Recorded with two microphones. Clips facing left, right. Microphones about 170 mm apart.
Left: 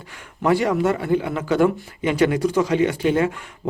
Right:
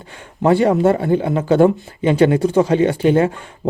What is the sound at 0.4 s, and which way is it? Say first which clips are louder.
Speech: right 5 dB; 30° right (ahead or behind).